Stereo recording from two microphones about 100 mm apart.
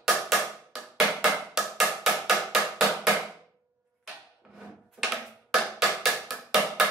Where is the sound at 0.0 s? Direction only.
5° right (ahead or behind).